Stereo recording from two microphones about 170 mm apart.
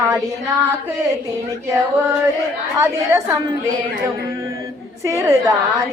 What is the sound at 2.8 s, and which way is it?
Speech, 20° right (ahead or behind).